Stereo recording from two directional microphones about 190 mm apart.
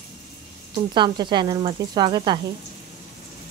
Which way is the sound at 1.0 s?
25° right (ahead or behind).